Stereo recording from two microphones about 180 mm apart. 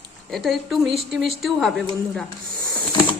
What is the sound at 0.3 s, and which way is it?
Speech, centre (ahead or behind).